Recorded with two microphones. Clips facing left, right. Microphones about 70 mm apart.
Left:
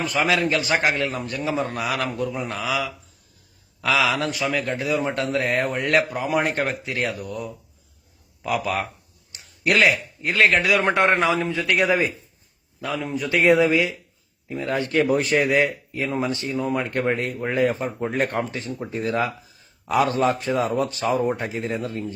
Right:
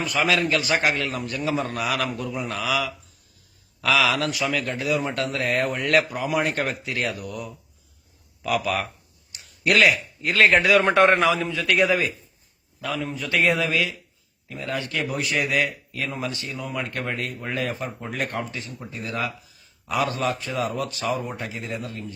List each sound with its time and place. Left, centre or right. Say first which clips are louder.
0.1 s speech: even; left
9.3 s a sound: even; left
10.3 s speech: right 1 dB; centre
10.8 s speech: right 2 dB; left
11.3 s speech: left 3 dB; left
11.9 s speech: left 2 dB; left
13.1 s speech: left 6 dB; left